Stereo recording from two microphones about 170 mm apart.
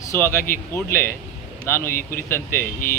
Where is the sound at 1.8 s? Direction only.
60° left (ahead or behind).